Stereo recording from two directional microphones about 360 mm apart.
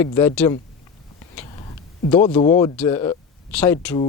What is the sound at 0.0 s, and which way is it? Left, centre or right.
Speech, centre.